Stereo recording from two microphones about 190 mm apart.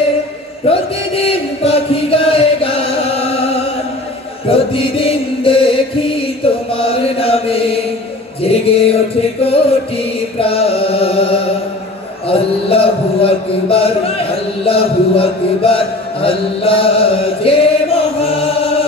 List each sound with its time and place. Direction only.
0.7 s chant: 30° left (ahead or behind)
9.4 s mantra: 30° left (ahead or behind)
18.2 s music: 30° left (ahead or behind)